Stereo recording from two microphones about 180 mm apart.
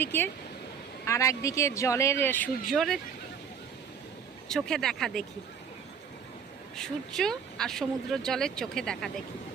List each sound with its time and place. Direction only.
0.0 s speech: 10° left (ahead or behind)
4.4 s speech: 5° left (ahead or behind)
6.7 s speech: 5° left (ahead or behind)